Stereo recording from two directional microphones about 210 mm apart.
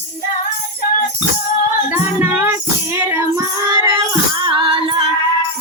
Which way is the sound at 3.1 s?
15° right (ahead or behind).